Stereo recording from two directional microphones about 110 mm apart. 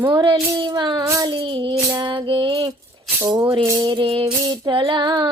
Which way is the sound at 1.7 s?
40° right (ahead or behind).